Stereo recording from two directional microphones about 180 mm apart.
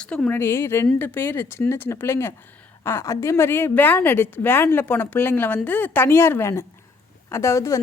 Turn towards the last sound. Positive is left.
turn(degrees=15)  # may be behind; listen again after turning